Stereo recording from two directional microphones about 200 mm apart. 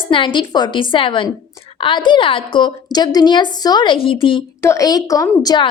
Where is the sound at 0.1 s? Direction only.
25° left (ahead or behind).